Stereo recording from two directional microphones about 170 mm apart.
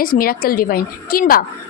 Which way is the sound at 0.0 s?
55° left (ahead or behind).